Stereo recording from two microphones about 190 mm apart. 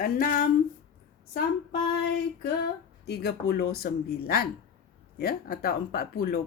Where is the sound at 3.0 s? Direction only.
55° left (ahead or behind).